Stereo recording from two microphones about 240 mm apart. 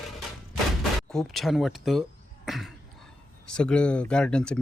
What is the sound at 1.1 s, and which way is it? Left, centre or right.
Speech, centre.